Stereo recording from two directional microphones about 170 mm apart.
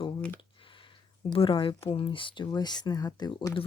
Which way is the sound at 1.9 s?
30° left (ahead or behind).